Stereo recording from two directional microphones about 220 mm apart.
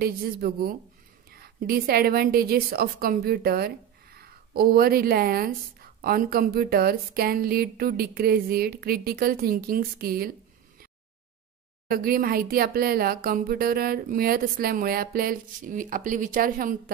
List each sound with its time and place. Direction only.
0.0 s a woman's voice: 40° right (ahead or behind)
11.9 s speech: 40° right (ahead or behind)